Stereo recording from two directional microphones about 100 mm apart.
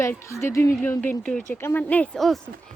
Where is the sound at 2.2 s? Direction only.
Centre (ahead or behind).